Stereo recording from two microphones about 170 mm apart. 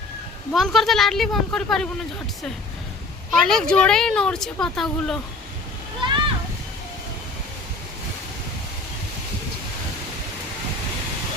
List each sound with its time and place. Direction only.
0.5 s speech: centre (ahead or behind)
3.4 s speech: 5° left (ahead or behind)
6.0 s a sound: 30° right (ahead or behind)